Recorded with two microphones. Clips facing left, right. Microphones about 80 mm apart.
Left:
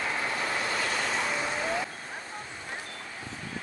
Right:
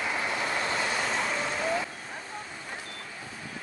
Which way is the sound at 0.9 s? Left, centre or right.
Centre.